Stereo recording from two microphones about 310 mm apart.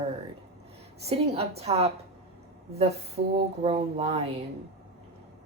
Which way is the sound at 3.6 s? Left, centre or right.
Centre.